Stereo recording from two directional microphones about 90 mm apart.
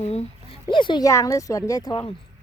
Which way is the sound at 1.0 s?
35° left (ahead or behind).